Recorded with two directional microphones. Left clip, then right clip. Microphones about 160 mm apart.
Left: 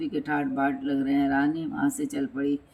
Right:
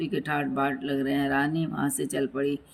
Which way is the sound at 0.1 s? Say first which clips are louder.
Even; 40° right (ahead or behind).